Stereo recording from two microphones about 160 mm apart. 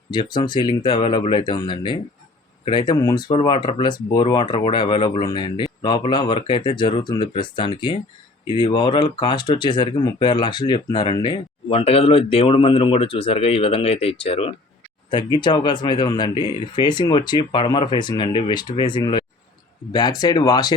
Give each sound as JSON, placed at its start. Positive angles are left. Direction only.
{"t": 0.1, "sound": "speech", "side_deg": 30}